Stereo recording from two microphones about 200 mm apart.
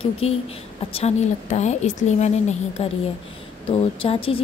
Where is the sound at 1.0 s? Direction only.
35° left (ahead or behind).